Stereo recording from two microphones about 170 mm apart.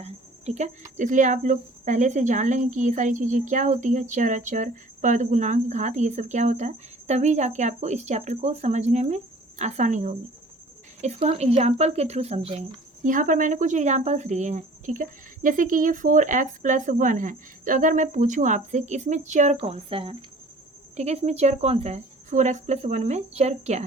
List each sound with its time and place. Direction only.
0.0 s speech: 40° right (ahead or behind)